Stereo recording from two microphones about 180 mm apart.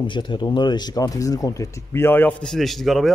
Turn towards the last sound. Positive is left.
turn(degrees=0)  # may be behind; listen again after turning